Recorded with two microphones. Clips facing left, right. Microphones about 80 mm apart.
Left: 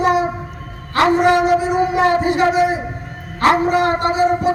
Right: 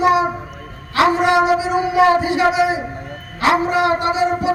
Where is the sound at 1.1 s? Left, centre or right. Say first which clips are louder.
Left 1 dB; left.